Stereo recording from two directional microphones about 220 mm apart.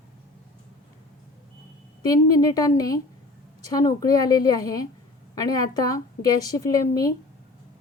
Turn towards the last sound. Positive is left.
turn(degrees=15)  # may be behind; listen again after turning